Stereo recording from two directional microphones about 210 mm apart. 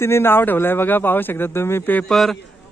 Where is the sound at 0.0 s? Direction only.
10° left (ahead or behind).